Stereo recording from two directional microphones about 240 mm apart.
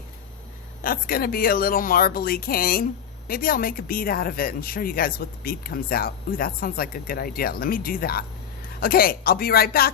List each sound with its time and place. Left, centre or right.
0.8 s speech: left